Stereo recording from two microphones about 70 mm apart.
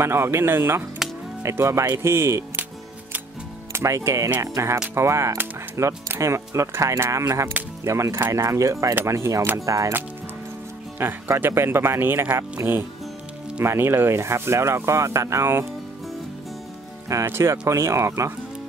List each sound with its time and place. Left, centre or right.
0.0 s speech: right
3.7 s speech: right
11.0 s speech: right
17.1 s speech: right